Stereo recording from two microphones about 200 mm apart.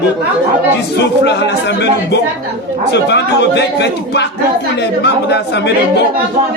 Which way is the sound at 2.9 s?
60° left (ahead or behind).